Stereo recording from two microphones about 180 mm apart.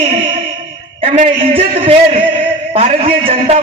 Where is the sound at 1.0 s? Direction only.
35° right (ahead or behind).